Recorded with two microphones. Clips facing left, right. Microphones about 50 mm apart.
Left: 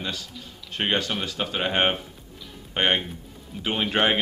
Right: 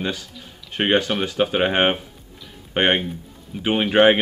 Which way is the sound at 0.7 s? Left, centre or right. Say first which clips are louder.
Right 6 dB; right.